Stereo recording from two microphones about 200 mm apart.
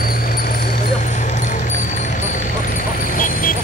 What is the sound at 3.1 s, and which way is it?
Vehicle, 45° left (ahead or behind).